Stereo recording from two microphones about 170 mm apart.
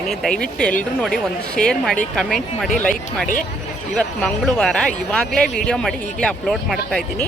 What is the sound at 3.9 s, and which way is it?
Speech, 5° left (ahead or behind).